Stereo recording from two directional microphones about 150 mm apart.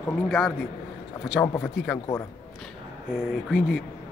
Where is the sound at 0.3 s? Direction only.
5° left (ahead or behind).